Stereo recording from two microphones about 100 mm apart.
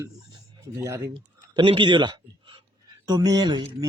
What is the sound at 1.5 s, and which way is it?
A man's voice, 55° right (ahead or behind).